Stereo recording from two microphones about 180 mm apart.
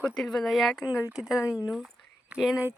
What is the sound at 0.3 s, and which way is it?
Speech, centre (ahead or behind).